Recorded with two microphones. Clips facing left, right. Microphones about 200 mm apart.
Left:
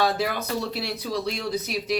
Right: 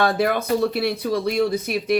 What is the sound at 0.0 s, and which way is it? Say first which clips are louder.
Speech: right 5 dB; 55° right (ahead or behind).